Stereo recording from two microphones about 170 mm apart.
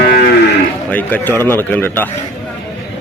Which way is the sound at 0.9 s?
10° left (ahead or behind).